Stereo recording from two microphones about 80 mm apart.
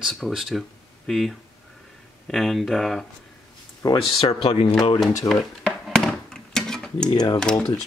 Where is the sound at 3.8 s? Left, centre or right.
Left.